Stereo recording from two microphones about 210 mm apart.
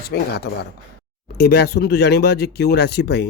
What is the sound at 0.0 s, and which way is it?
Speech, 50° left (ahead or behind).